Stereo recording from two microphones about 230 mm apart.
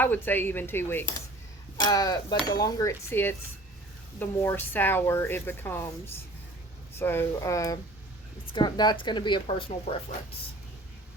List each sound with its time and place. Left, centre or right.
0.0 s a woman's voice: centre
7.0 s a woman's voice: centre